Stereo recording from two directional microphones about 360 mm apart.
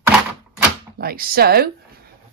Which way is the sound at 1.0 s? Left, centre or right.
Right.